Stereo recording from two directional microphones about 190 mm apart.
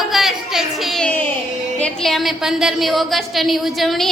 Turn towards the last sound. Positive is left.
turn(degrees=0)  # may be behind; listen again after turning